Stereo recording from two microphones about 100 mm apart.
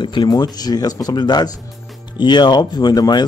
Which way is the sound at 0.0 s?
45° left (ahead or behind).